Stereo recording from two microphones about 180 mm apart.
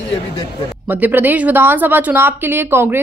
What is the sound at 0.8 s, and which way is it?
A woman's voice, 10° right (ahead or behind).